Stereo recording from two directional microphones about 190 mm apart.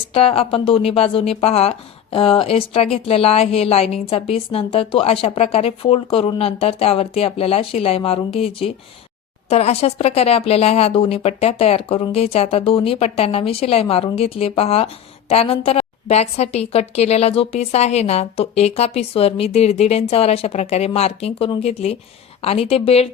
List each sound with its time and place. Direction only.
0.1 s speech: 30° left (ahead or behind)